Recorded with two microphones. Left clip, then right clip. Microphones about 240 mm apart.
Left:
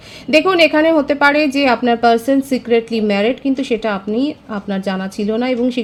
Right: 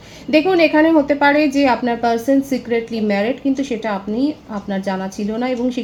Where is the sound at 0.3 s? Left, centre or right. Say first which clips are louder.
Left 2 dB; left.